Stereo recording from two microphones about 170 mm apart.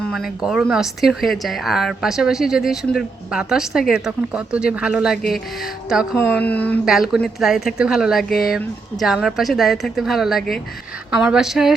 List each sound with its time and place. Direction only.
0.1 s speech: centre (ahead or behind)
6.3 s speech: 10° left (ahead or behind)
6.8 s speech: 5° right (ahead or behind)